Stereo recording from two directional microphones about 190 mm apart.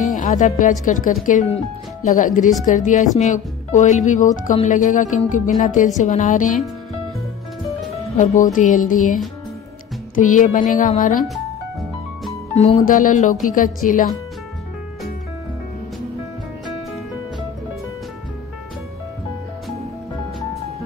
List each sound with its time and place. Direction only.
0.0 s speech: 40° left (ahead or behind)
8.2 s speech: 40° left (ahead or behind)
12.5 s speech: 35° left (ahead or behind)